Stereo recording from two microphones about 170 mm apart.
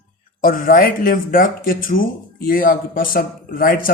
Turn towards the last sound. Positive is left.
turn(degrees=60)  # may be behind; listen again after turning